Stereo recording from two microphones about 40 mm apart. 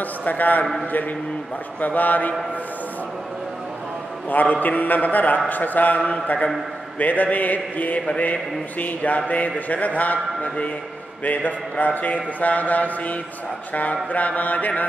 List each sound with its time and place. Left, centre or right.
0.0 s a man's voice: left
1.8 s a man's voice: left
4.3 s a man's voice: left